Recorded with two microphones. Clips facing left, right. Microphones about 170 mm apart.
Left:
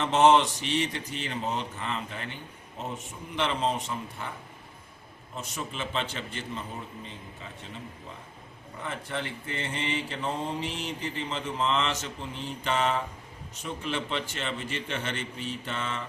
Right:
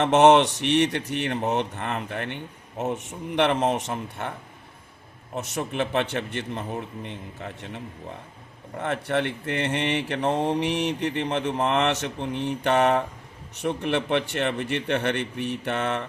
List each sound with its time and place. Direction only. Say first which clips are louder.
0.0 s speech: right 5 dB; 70° right (ahead or behind)
5.3 s a man's voice: right 7 dB; 70° right (ahead or behind)